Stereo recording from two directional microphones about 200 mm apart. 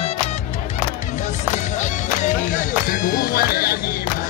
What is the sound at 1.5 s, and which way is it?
Music, 40° left (ahead or behind).